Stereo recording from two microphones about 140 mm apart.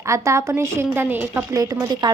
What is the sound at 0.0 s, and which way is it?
A woman's voice, 20° right (ahead or behind).